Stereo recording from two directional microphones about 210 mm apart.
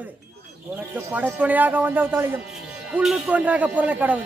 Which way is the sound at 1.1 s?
5° right (ahead or behind).